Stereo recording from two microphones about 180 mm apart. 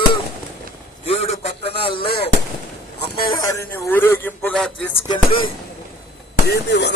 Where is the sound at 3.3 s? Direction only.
15° left (ahead or behind).